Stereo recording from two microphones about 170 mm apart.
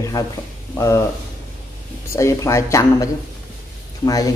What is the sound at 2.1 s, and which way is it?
Speech, 15° left (ahead or behind).